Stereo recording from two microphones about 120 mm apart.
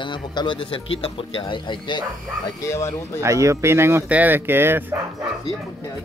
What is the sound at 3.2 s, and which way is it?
Speech, 25° right (ahead or behind).